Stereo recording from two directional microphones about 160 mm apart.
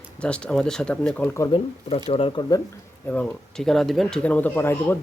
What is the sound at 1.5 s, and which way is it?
Speech, 35° left (ahead or behind).